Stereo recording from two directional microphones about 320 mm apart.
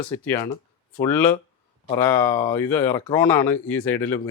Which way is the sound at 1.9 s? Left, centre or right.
Centre.